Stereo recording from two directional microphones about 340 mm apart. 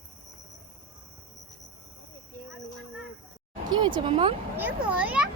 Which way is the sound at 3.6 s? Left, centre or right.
Centre.